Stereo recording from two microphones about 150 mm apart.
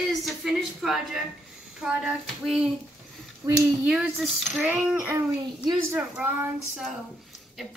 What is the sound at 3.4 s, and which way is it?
Speech, 25° right (ahead or behind).